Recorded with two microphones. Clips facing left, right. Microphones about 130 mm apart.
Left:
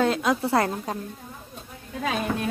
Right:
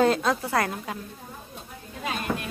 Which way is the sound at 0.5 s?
25° left (ahead or behind).